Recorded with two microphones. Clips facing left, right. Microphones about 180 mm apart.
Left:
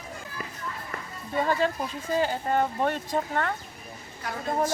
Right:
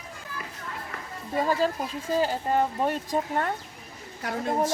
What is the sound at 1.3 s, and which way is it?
Speech, 5° right (ahead or behind).